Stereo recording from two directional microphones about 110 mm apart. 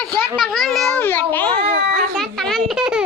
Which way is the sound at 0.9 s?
20° left (ahead or behind).